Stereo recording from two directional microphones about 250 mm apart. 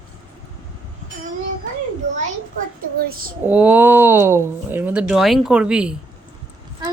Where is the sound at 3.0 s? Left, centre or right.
Right.